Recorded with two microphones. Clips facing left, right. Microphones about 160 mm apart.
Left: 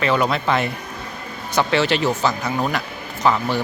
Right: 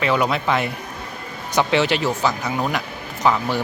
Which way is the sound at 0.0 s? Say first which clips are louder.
Left 1 dB; 10° right (ahead or behind).